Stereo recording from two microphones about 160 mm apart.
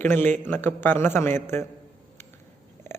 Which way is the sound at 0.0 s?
15° left (ahead or behind).